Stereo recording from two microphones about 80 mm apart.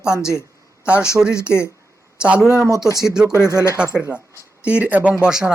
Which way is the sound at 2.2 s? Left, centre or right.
Centre.